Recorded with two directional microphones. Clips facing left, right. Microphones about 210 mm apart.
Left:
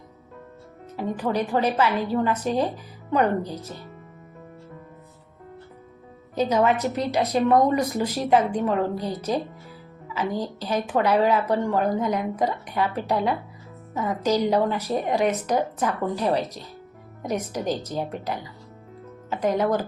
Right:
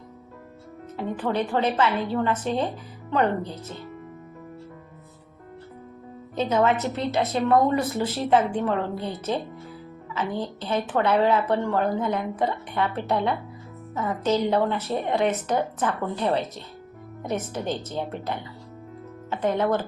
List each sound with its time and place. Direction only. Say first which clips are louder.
0.9 s a woman's voice: left 1 dB; 10° left (ahead or behind)
6.3 s a woman's voice: left 1 dB; 10° left (ahead or behind)
10.2 s a woman's voice: left 2 dB; 10° left (ahead or behind)